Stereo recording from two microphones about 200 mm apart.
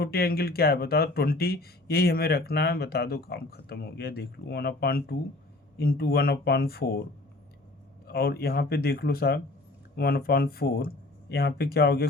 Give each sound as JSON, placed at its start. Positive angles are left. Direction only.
{"t": 0.0, "sound": "speech", "side_deg": 50}
{"t": 8.0, "sound": "speech", "side_deg": 50}